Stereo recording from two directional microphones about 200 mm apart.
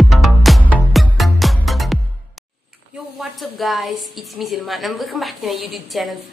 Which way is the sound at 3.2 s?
Centre (ahead or behind).